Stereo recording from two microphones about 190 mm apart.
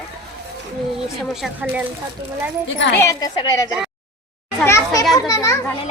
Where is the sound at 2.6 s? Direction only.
70° left (ahead or behind).